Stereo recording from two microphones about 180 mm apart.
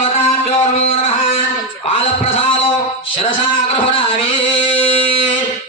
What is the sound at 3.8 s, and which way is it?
Speech, 30° left (ahead or behind).